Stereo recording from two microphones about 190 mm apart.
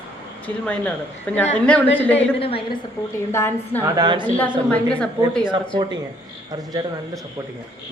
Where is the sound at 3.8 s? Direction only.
20° right (ahead or behind).